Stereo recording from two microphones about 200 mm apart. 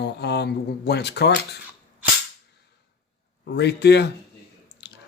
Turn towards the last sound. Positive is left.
turn(degrees=55)  # may be behind; listen again after turning